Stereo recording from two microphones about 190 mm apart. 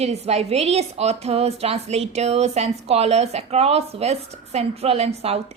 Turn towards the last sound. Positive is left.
turn(degrees=-35)  # may be behind; listen again after turning